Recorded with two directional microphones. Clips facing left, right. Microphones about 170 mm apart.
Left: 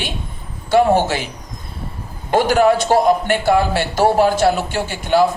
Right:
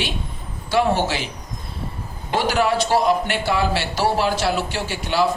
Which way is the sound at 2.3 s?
50° left (ahead or behind).